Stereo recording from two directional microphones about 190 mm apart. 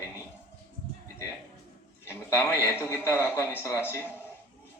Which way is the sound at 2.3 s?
10° left (ahead or behind).